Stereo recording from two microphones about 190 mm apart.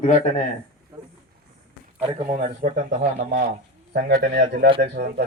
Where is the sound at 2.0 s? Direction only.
25° right (ahead or behind).